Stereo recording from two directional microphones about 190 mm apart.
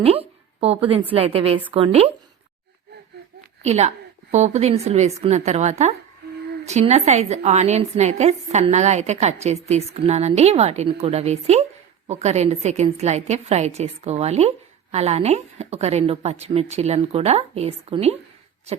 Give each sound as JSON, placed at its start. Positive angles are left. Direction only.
{"t": 0.0, "sound": "a woman's voice", "side_deg": -30}
{"t": 3.6, "sound": "a woman's voice", "side_deg": -35}